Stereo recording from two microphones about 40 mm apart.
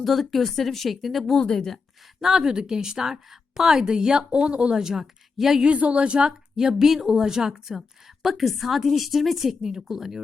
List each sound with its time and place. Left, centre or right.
0.0 s a woman's voice: centre
2.2 s a woman's voice: centre
4.3 s speech: right
4.8 s a woman's voice: centre
5.6 s speech: right
6.6 s a woman's voice: centre
7.8 s a woman's voice: centre